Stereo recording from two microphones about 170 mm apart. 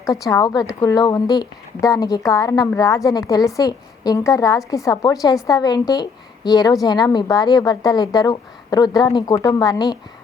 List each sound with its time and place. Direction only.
0.0 s a woman's voice: 20° left (ahead or behind)